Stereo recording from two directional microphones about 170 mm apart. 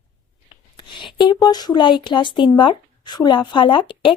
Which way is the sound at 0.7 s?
30° left (ahead or behind).